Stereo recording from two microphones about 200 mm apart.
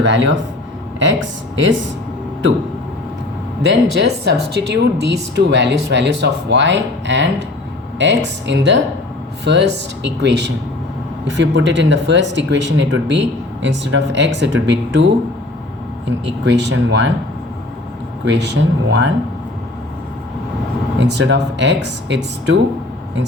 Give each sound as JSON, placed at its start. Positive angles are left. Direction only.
{"t": 0.0, "sound": "speech", "side_deg": -65}
{"t": 3.6, "sound": "speech", "side_deg": -60}
{"t": 16.2, "sound": "speech", "side_deg": -60}
{"t": 18.9, "sound": "speech", "side_deg": -60}
{"t": 21.0, "sound": "speech", "side_deg": -60}